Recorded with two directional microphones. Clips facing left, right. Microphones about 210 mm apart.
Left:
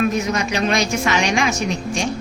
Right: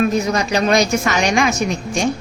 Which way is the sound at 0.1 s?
35° right (ahead or behind).